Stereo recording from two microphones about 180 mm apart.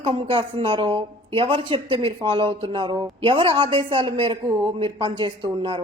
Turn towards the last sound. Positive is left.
turn(degrees=-25)  # may be behind; listen again after turning